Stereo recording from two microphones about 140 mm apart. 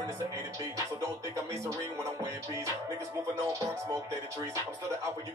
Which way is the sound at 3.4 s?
20° right (ahead or behind).